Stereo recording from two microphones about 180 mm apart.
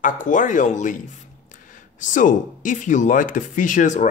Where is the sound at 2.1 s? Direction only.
45° left (ahead or behind).